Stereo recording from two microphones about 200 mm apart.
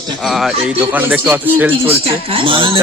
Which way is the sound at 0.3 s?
Centre (ahead or behind).